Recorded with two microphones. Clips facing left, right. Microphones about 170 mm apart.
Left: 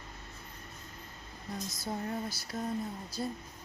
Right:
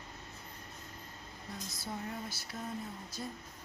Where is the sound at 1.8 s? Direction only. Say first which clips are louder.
Left 5 dB; 40° left (ahead or behind).